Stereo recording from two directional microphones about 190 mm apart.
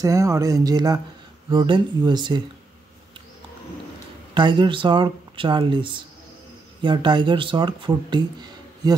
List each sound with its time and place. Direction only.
0.0 s speech: 15° right (ahead or behind)
4.3 s speech: 25° right (ahead or behind)